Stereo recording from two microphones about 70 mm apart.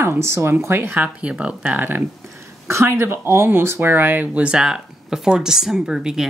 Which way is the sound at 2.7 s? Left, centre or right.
Right.